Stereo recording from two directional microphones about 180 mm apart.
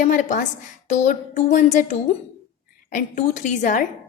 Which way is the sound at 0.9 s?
40° left (ahead or behind).